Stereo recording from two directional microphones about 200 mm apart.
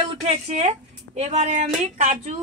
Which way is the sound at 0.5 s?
35° right (ahead or behind).